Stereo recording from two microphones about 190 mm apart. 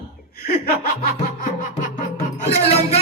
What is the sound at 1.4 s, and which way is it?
A man's voice, 40° left (ahead or behind).